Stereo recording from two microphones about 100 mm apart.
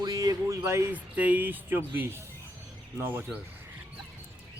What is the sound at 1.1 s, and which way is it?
Speech, 15° right (ahead or behind).